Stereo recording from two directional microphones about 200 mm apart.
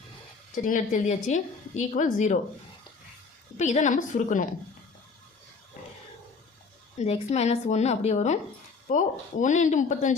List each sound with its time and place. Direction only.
0.5 s a woman's voice: 40° left (ahead or behind)
3.6 s a woman's voice: 35° left (ahead or behind)
7.0 s a woman's voice: 35° left (ahead or behind)